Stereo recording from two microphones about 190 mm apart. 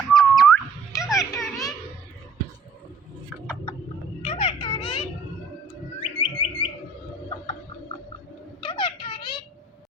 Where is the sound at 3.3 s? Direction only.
Centre (ahead or behind).